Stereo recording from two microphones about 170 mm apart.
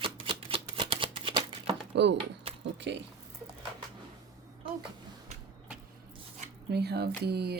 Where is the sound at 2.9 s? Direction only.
90° right.